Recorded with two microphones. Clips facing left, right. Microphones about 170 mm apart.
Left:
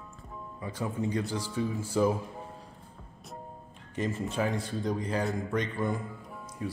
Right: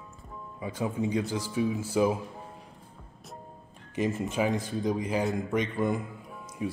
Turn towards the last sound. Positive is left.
turn(degrees=-15)  # may be behind; listen again after turning